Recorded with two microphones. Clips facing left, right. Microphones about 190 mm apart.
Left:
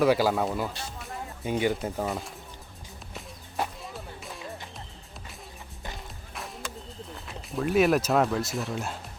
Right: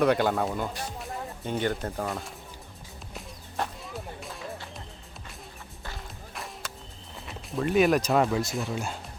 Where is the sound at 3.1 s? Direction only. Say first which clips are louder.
Left 1 dB; centre (ahead or behind).